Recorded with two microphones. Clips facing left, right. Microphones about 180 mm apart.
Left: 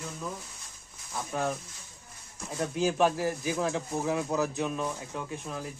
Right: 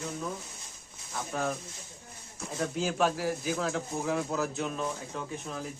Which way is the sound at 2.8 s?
15° left (ahead or behind).